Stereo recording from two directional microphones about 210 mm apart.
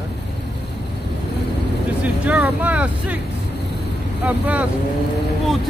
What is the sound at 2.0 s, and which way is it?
Speech, 5° right (ahead or behind).